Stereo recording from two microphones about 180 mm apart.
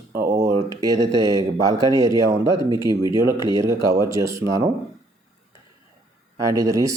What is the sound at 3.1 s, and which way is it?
Speech, 15° right (ahead or behind).